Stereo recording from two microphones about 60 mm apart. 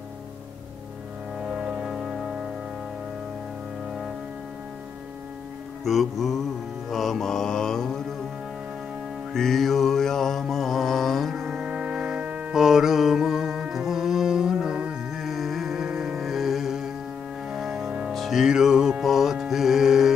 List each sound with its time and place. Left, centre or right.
1.5 s music: centre
5.9 s mantra: centre
9.3 s music: centre
11.3 s music: centre
12.5 s music: centre
15.2 s music: centre
17.5 s organ: centre
18.1 s music: centre
18.4 s music: centre